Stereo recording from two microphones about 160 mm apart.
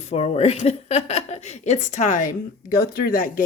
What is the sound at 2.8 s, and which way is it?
Speech, 70° left (ahead or behind).